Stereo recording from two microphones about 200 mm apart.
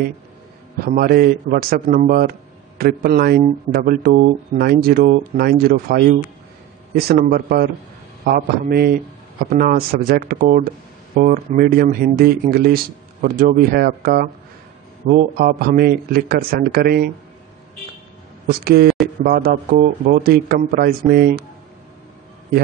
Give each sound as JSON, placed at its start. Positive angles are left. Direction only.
{"t": 0.8, "sound": "speech", "side_deg": -50}
{"t": 18.5, "sound": "speech", "side_deg": -50}